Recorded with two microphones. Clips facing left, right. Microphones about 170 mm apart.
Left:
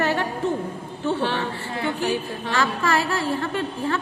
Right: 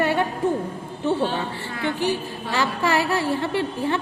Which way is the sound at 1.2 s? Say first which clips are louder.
Right 1 dB; 75° left (ahead or behind).